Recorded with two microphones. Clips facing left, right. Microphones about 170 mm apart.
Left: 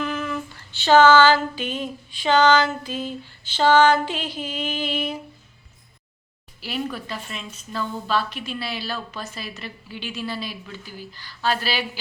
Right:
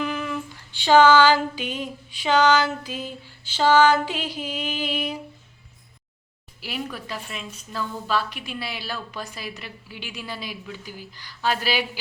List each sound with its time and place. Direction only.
0.0 s female singing: 10° right (ahead or behind)
2.8 s a woman's voice: 10° right (ahead or behind)
6.6 s a woman's voice: 10° right (ahead or behind)